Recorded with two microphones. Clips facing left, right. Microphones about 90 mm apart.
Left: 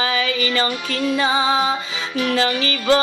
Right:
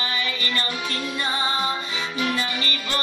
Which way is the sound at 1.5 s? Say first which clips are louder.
Left 6 dB; 90° left.